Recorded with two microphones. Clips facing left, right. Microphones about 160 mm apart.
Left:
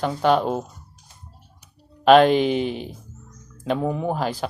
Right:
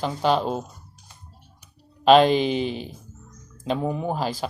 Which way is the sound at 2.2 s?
50° left (ahead or behind).